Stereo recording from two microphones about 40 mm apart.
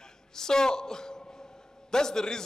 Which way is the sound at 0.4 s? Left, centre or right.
Centre.